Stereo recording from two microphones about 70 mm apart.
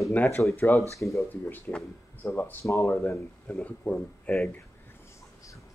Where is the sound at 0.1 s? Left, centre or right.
Left.